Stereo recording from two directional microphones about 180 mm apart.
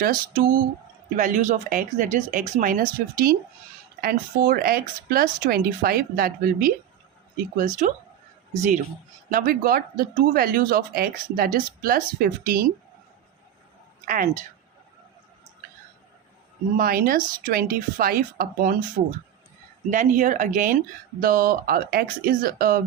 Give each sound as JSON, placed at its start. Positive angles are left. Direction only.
{"t": 0.0, "sound": "speech", "side_deg": -50}
{"t": 7.6, "sound": "speech", "side_deg": -45}
{"t": 9.3, "sound": "speech", "side_deg": -55}
{"t": 14.0, "sound": "speech", "side_deg": -50}
{"t": 16.7, "sound": "speech", "side_deg": -50}
{"t": 19.9, "sound": "speech", "side_deg": -45}